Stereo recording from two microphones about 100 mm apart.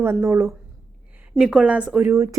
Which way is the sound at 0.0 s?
25° right (ahead or behind).